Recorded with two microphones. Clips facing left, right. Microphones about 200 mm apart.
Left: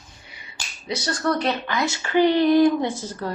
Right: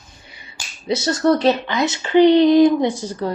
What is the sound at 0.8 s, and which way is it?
A woman's voice, 25° right (ahead or behind).